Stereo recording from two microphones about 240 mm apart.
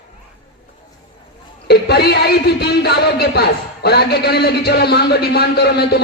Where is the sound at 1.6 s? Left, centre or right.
Left.